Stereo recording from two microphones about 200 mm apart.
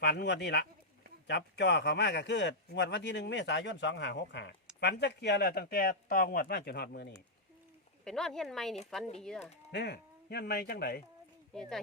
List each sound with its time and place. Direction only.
0.0 s speech: 55° left (ahead or behind)
8.0 s speech: centre (ahead or behind)
9.7 s speech: 55° left (ahead or behind)